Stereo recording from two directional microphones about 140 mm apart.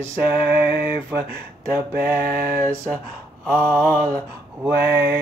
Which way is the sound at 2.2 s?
90° right.